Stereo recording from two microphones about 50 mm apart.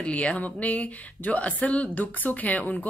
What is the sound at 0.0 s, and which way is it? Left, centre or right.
Speech, left.